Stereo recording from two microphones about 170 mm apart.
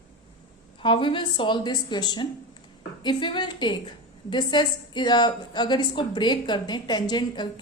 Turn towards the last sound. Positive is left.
turn(degrees=25)  # may be behind; listen again after turning